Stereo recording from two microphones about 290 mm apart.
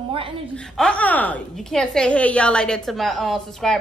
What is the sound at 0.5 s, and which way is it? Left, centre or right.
A woman's voice, centre.